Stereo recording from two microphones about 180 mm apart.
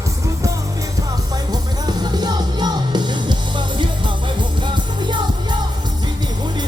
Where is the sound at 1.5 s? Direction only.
20° right (ahead or behind).